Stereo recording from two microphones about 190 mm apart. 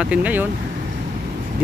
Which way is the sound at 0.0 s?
5° right (ahead or behind).